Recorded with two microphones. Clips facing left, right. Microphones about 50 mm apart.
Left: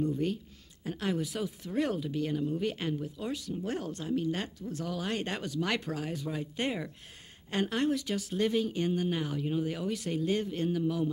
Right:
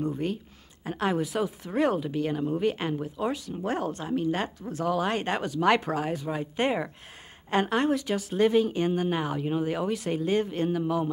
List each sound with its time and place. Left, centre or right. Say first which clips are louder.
0.0 s speech: right 1 dB; right